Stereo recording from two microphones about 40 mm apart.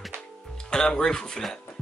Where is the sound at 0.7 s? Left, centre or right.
Centre.